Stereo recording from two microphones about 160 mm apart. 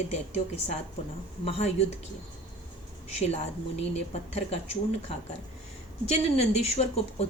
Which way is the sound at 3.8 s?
45° left (ahead or behind).